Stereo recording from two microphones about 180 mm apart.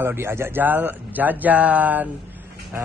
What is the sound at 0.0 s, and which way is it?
A man's voice, 15° right (ahead or behind).